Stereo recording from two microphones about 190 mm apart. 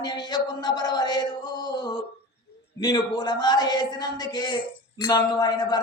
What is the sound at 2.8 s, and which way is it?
A man's voice, 20° left (ahead or behind).